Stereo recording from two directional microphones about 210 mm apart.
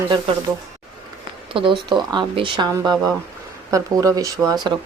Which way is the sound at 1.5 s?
25° right (ahead or behind).